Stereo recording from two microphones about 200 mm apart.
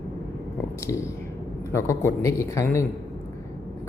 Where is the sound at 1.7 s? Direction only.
15° left (ahead or behind).